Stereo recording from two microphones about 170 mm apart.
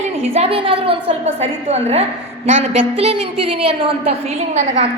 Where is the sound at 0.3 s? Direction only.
35° right (ahead or behind).